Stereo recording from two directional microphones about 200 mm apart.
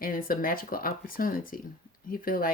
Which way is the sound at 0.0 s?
45° left (ahead or behind).